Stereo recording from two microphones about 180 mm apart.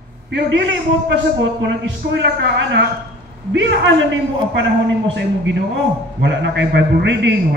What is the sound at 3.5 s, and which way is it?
A man's voice, 90° right.